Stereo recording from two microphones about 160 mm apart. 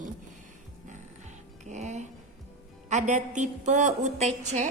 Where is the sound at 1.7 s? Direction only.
45° right (ahead or behind).